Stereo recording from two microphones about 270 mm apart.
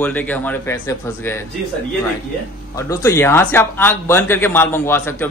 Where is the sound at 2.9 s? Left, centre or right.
Centre.